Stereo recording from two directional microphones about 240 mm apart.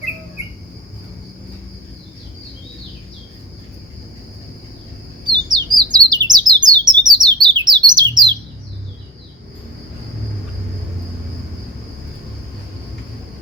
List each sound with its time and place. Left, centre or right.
5.2 s bird: centre